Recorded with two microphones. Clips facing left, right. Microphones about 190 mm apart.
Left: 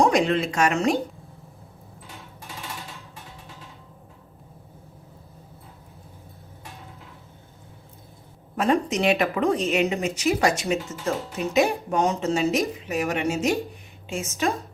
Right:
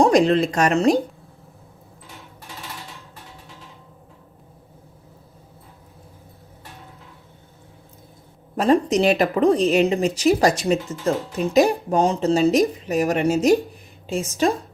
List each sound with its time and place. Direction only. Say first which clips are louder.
0.0 s a woman's voice: right 5 dB; 35° right (ahead or behind)
8.5 s a woman's voice: right 5 dB; 35° right (ahead or behind)